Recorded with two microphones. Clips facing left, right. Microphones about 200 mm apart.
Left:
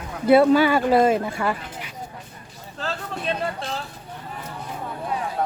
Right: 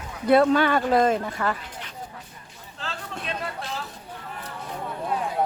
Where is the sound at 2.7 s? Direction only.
40° left (ahead or behind).